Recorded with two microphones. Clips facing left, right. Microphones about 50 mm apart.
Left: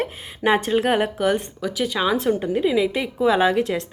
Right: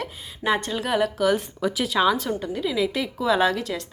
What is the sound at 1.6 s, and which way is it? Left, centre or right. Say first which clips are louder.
Speech: right 2 dB; centre.